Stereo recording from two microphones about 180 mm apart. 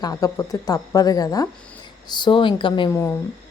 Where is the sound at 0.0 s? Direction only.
20° left (ahead or behind).